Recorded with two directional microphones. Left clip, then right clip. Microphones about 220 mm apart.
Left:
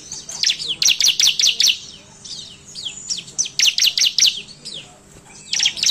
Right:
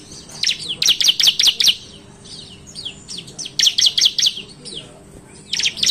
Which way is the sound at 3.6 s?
20° left (ahead or behind).